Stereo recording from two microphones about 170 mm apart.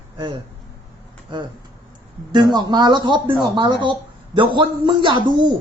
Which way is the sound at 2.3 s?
25° right (ahead or behind).